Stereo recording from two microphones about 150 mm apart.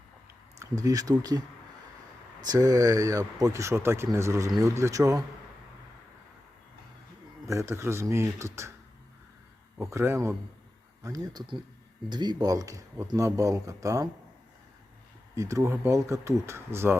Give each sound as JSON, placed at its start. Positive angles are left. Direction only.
{"t": 0.6, "sound": "speech", "side_deg": -25}
{"t": 2.4, "sound": "speech", "side_deg": -25}
{"t": 7.4, "sound": "speech", "side_deg": -20}
{"t": 9.8, "sound": "speech", "side_deg": -20}
{"t": 15.4, "sound": "speech", "side_deg": -20}